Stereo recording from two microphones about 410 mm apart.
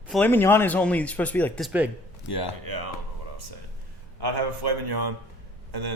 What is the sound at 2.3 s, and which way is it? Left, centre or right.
Speech, left.